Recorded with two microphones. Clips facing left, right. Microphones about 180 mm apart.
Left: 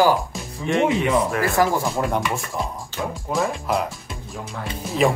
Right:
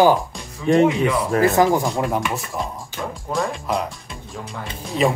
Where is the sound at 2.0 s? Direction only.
Centre (ahead or behind).